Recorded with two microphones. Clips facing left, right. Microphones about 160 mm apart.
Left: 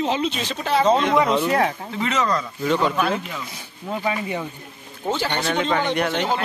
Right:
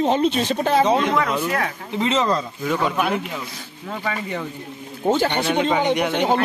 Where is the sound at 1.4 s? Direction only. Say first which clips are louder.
Left 4 dB; 30° left (ahead or behind).